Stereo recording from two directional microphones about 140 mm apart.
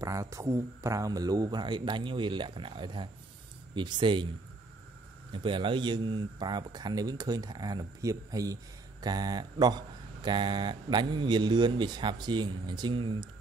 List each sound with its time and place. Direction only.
0.0 s speech: 25° right (ahead or behind)
5.3 s speech: 35° right (ahead or behind)